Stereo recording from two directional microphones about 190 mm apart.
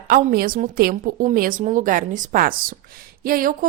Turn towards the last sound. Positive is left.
turn(degrees=-50)  # may be behind; listen again after turning